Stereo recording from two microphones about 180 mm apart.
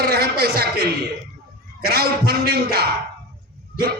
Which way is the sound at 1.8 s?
60° right (ahead or behind).